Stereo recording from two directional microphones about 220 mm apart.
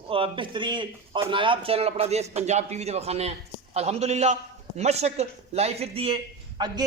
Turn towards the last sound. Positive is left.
turn(degrees=-20)  # may be behind; listen again after turning